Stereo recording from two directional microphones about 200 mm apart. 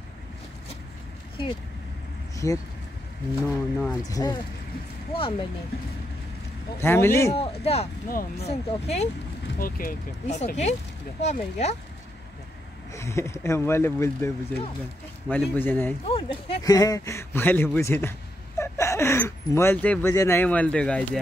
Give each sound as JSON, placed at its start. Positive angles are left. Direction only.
{"t": 2.3, "sound": "speech", "side_deg": 15}
{"t": 6.8, "sound": "speech", "side_deg": 10}
{"t": 7.3, "sound": "speech", "side_deg": 30}
{"t": 8.1, "sound": "speech", "side_deg": 45}
{"t": 8.5, "sound": "speech", "side_deg": 30}
{"t": 9.6, "sound": "speech", "side_deg": 45}
{"t": 12.9, "sound": "speech", "side_deg": 15}
{"t": 16.1, "sound": "speech", "side_deg": 25}